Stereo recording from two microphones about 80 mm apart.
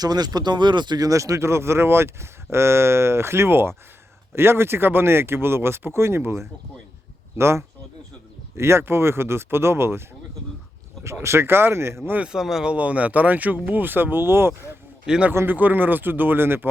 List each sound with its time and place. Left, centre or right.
0.0 s speech: right
11.0 s speech: right
12.3 s speech: centre; by 14.5 s right
15.0 s speech: centre
15.3 s speech: right